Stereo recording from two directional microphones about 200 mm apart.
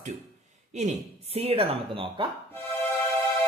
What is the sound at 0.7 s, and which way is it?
Speech, 35° right (ahead or behind).